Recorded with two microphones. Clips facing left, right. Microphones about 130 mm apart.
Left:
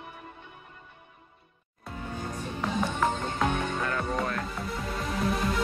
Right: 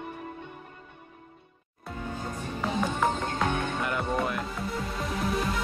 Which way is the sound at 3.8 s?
15° right (ahead or behind).